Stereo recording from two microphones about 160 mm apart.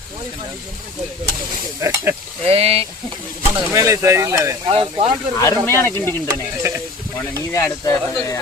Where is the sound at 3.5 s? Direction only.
20° right (ahead or behind).